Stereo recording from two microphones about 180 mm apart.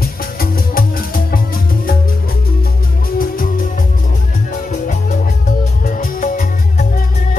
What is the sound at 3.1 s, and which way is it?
Music, 50° left (ahead or behind).